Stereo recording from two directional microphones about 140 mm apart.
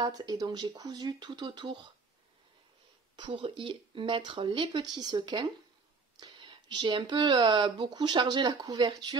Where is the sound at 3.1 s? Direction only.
35° right (ahead or behind).